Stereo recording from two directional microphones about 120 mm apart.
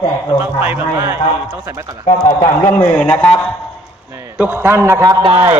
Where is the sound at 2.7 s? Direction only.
10° left (ahead or behind).